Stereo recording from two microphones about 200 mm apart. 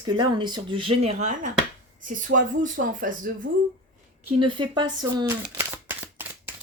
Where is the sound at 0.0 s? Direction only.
25° right (ahead or behind); by 3.3 s 40° right (ahead or behind).